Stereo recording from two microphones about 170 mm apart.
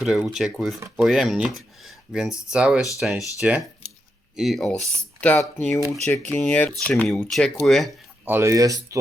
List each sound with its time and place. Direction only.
0.0 s speech: 5° right (ahead or behind)
8.3 s speech: 15° right (ahead or behind)